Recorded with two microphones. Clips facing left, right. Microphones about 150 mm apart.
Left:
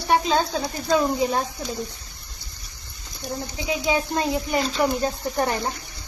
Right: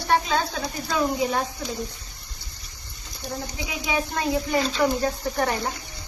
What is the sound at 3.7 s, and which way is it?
Speech, 25° left (ahead or behind).